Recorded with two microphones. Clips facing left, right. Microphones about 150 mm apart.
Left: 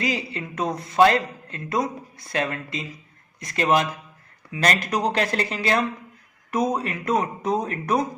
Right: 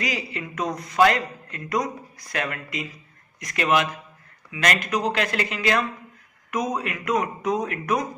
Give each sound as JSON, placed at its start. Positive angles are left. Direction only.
{"t": 0.0, "sound": "speech", "side_deg": 30}